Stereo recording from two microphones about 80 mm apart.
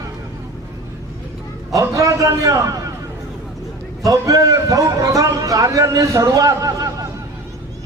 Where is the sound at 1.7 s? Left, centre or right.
Right.